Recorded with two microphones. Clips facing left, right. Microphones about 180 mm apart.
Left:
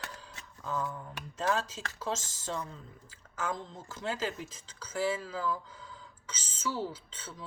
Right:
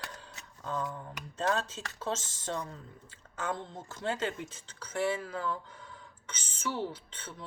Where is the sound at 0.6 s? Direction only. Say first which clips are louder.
Even; 25° right (ahead or behind).